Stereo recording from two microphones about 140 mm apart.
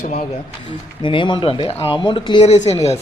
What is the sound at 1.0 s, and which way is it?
Speech, 35° left (ahead or behind).